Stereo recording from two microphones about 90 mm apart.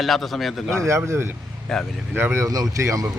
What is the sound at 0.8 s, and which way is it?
Speech, 35° right (ahead or behind).